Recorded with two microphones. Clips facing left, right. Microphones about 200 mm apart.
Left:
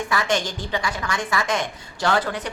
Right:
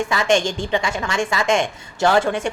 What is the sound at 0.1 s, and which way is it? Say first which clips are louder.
A woman's voice: right 4 dB; 25° right (ahead or behind).